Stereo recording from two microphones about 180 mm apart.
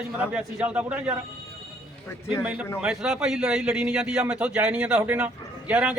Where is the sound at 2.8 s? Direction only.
5° right (ahead or behind).